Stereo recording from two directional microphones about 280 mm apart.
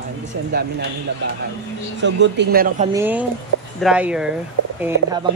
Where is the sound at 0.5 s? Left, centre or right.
Right.